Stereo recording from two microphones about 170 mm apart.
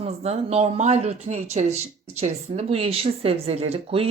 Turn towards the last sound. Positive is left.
turn(degrees=-35)  # may be behind; listen again after turning